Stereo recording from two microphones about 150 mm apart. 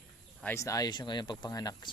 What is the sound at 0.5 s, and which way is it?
Speech, 20° left (ahead or behind).